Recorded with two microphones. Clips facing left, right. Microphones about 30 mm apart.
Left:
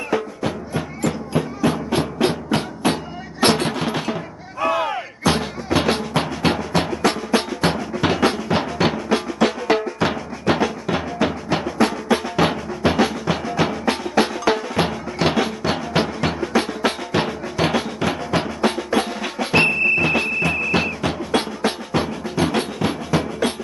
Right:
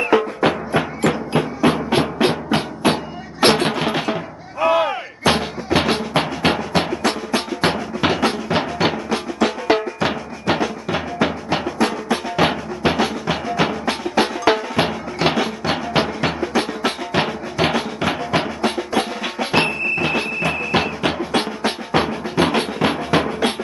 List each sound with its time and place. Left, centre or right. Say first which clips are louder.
0.4 s music: right 7 dB; right; by 7.0 s centre
7.0 s music: left 1 dB; centre
7.6 s music: right 1 dB; centre
8.2 s music: even; centre
9.4 s drum: even; centre
9.9 s music: even; centre
17.2 s drum: right 2 dB; centre
17.7 s music: right 1 dB; centre
18.9 s drum: right 1 dB; centre
20.7 s music: right 2 dB; right